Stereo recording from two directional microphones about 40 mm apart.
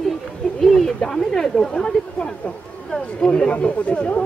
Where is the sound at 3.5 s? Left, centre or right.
Left.